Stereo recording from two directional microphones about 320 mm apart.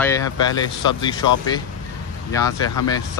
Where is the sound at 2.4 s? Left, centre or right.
Left.